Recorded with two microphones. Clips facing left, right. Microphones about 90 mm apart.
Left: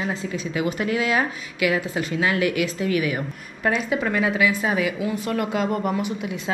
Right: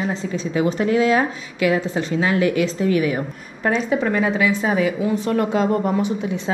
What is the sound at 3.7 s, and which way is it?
Speech, 5° left (ahead or behind).